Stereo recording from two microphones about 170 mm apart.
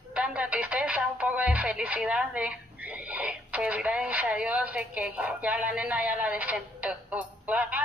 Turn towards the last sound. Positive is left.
turn(degrees=-10)  # may be behind; listen again after turning